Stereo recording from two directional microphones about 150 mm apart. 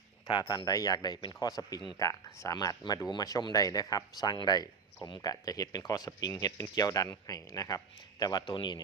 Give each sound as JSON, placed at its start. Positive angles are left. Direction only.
{"t": 0.3, "sound": "speech", "side_deg": 30}